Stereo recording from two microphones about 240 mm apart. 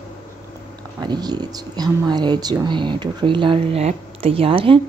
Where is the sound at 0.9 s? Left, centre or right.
Centre.